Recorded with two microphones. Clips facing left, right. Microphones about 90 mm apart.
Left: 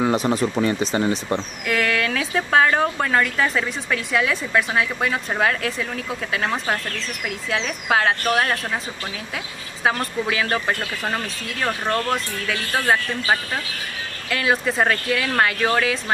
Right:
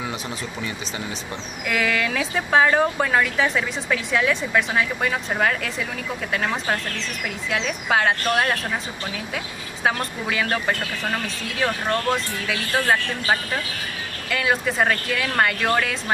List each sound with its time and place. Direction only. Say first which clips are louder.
0.0 s speech: left 10 dB; 45° left (ahead or behind)
1.7 s a woman's voice: left 1 dB; centre (ahead or behind)
9.8 s a woman's voice: left 2 dB; centre (ahead or behind)